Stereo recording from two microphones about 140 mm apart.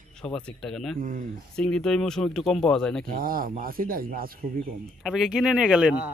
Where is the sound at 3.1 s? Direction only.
90° right.